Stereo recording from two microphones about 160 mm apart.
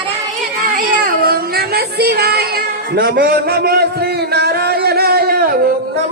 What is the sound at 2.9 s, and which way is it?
Speech, 80° right.